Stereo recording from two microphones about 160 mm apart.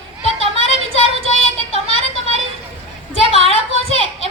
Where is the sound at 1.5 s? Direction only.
40° left (ahead or behind).